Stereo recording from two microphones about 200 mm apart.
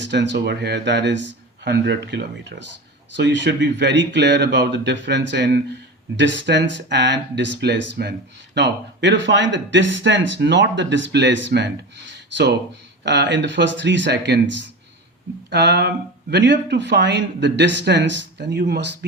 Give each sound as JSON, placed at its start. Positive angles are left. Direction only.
{"t": 0.0, "sound": "speech", "side_deg": -60}
{"t": 13.1, "sound": "speech", "side_deg": -65}